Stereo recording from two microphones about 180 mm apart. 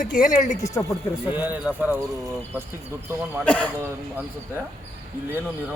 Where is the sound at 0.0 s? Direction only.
45° left (ahead or behind).